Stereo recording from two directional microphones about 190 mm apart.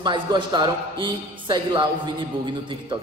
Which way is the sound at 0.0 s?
25° right (ahead or behind).